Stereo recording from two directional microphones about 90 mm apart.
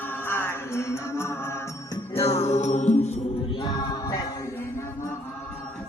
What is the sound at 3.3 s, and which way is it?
Music, 85° left.